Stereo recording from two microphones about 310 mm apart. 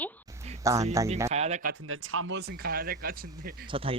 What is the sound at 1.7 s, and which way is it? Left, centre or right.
Speech, right.